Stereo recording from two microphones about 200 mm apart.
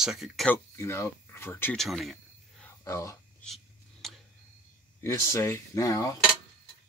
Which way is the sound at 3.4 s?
Centre (ahead or behind).